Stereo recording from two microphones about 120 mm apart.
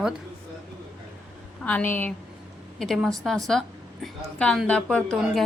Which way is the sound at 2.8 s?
Centre (ahead or behind).